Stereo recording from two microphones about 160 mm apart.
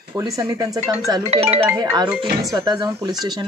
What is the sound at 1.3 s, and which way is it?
Speech, 40° right (ahead or behind).